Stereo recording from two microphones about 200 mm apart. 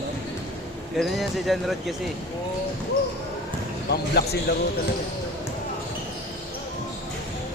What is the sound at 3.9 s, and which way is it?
Speech, 55° left (ahead or behind).